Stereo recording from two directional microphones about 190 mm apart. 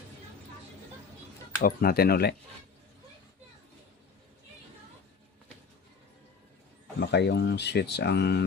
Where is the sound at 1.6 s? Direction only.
55° left (ahead or behind).